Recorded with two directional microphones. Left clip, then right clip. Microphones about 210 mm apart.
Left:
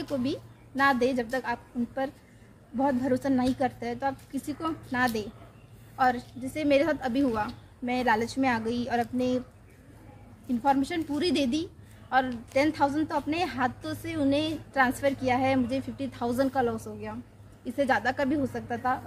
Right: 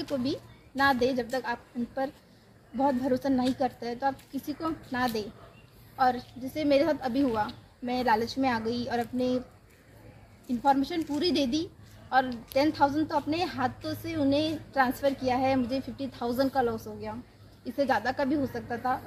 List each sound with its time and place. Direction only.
0.0 s a woman's voice: centre (ahead or behind)
10.6 s a woman's voice: centre (ahead or behind)